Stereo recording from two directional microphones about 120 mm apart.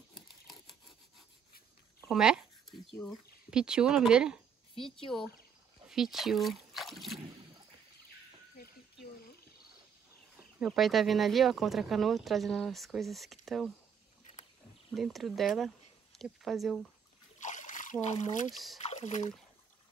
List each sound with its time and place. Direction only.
0.1 s wood: centre (ahead or behind)
2.0 s a sound: 5° right (ahead or behind)
3.1 s speech: 5° right (ahead or behind)
5.9 s speech: centre (ahead or behind)
10.6 s speech: centre (ahead or behind)
15.0 s speech: centre (ahead or behind)
17.4 s splash: 90° left
18.0 s speech: 80° left
18.5 s speech: centre (ahead or behind)
18.8 s speech: 65° left (ahead or behind)